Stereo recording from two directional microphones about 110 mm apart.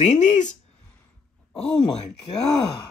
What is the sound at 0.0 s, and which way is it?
Speech, 90° left.